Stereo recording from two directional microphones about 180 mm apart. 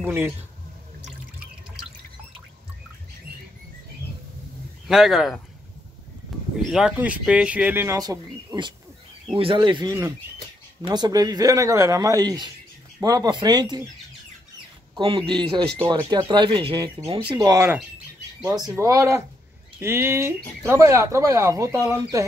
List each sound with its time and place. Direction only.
0.0 s speech: 10° right (ahead or behind)
4.8 s speech: centre (ahead or behind)
6.7 s speech: 5° right (ahead or behind); by 13.8 s 25° right (ahead or behind)
15.0 s speech: 30° right (ahead or behind)